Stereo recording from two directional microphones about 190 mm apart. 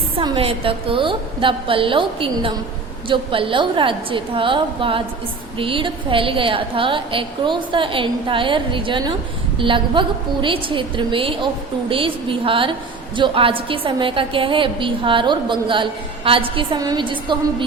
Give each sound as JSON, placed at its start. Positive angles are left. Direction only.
{"t": 0.2, "sound": "a woman's voice", "side_deg": -30}